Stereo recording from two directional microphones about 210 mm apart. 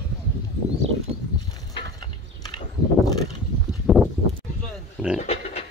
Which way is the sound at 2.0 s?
20° left (ahead or behind).